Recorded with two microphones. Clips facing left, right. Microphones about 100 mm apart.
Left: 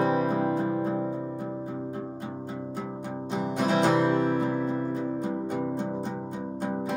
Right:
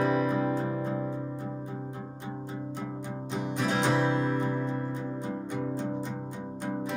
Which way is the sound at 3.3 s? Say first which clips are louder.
Left 4 dB; 45° left (ahead or behind).